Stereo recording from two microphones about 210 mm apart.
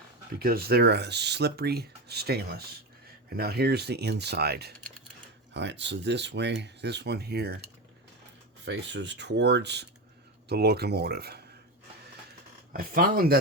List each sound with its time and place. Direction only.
0.3 s speech: 45° right (ahead or behind)
8.6 s speech: 55° right (ahead or behind)
12.7 s speech: 45° right (ahead or behind)